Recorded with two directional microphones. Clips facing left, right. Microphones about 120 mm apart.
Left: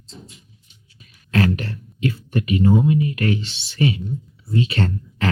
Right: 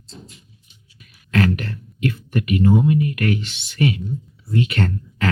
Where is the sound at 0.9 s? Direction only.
30° left (ahead or behind).